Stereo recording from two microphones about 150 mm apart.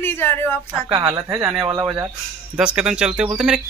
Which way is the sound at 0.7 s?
25° right (ahead or behind).